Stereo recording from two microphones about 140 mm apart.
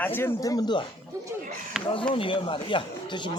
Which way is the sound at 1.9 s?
40° left (ahead or behind).